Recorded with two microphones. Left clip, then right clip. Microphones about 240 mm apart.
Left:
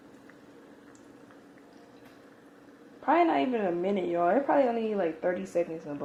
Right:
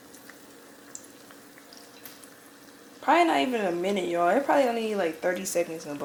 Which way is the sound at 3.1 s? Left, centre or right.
Centre.